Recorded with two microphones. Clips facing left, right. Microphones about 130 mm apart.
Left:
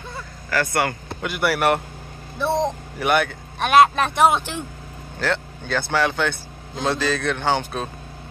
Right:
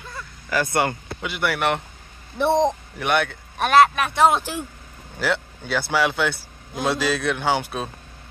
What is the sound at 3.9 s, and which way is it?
Speech, 30° left (ahead or behind).